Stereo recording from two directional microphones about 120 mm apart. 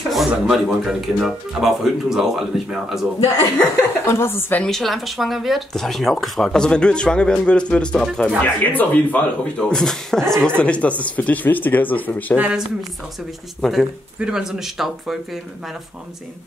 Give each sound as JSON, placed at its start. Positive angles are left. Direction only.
{"t": 0.1, "sound": "speech", "side_deg": 0}
{"t": 3.5, "sound": "a woman's voice", "side_deg": 20}
{"t": 4.6, "sound": "speech", "side_deg": 0}
{"t": 12.4, "sound": "speech", "side_deg": -10}